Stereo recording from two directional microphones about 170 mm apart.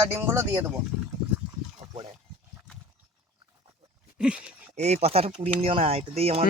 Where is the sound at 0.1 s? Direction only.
15° right (ahead or behind).